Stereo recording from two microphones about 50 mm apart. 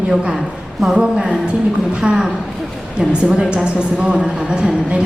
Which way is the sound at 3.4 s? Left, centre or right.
Centre.